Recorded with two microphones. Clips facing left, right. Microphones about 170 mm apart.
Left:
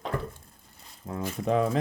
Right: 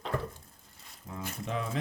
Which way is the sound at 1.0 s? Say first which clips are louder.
Left 7 dB; 60° left (ahead or behind).